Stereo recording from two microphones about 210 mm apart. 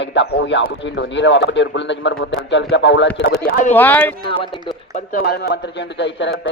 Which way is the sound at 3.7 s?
10° left (ahead or behind).